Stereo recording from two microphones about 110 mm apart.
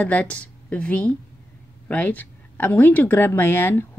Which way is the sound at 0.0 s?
15° left (ahead or behind).